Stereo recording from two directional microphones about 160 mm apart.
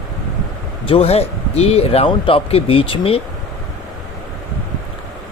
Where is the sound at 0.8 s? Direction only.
35° left (ahead or behind).